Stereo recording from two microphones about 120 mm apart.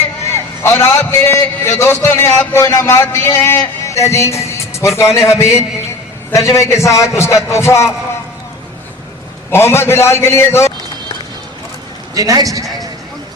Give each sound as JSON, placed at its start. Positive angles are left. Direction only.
{"t": 0.6, "sound": "a man's voice", "side_deg": 20}
{"t": 9.5, "sound": "a man's voice", "side_deg": 20}
{"t": 12.1, "sound": "a man's voice", "side_deg": -30}